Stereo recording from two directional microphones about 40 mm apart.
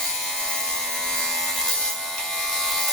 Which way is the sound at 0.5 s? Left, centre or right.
Centre.